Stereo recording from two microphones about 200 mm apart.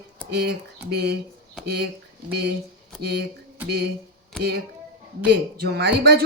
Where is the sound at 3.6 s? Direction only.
10° right (ahead or behind).